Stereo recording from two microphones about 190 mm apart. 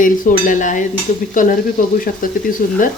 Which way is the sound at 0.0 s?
45° left (ahead or behind).